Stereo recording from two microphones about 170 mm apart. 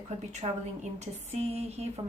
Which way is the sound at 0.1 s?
40° right (ahead or behind).